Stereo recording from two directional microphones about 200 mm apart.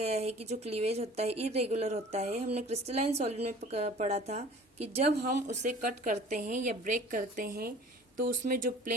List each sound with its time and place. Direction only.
0.0 s speech: 30° right (ahead or behind)